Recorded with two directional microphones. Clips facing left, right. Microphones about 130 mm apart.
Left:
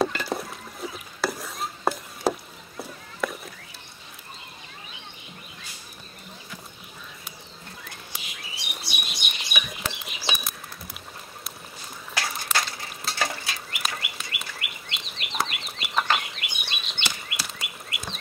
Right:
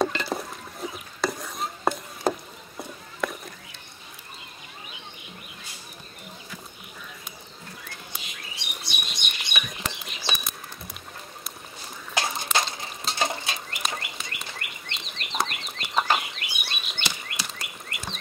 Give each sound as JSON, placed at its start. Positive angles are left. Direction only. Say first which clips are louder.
{"t": 0.0, "sound": "rowboat", "louder": "even", "side_deg": 0}
{"t": 0.8, "sound": "stir", "louder": "even", "side_deg": 0}
{"t": 2.8, "sound": "a sound", "louder": "even", "side_deg": 0}
{"t": 8.1, "sound": "bird", "louder": "even", "side_deg": 5}
{"t": 12.1, "sound": "walk", "louder": "right 3 dB", "side_deg": -20}
{"t": 12.5, "sound": "a sound", "louder": "right 2 dB", "side_deg": -20}
{"t": 13.7, "sound": "bird", "louder": "right 1 dB", "side_deg": 5}
{"t": 16.0, "sound": "bird", "louder": "right 1 dB", "side_deg": -10}
{"t": 17.0, "sound": "a sound", "louder": "even", "side_deg": 5}